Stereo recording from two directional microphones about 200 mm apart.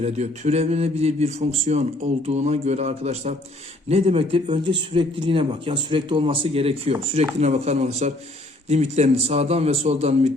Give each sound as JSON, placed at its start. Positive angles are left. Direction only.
{"t": 0.0, "sound": "speech", "side_deg": -30}